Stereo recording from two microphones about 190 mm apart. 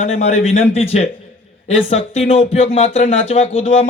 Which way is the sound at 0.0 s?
35° left (ahead or behind).